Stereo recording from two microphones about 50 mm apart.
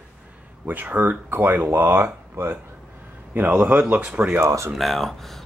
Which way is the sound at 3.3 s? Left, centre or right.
Right.